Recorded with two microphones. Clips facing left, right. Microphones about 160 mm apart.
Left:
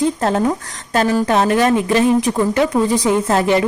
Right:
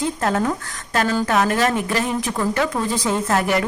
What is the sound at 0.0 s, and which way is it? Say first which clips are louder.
A woman's voice: left 5 dB; 20° left (ahead or behind).